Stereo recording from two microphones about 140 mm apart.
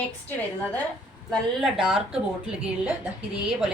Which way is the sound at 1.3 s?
Centre (ahead or behind).